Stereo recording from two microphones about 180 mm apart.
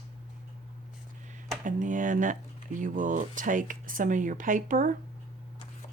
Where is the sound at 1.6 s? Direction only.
45° right (ahead or behind).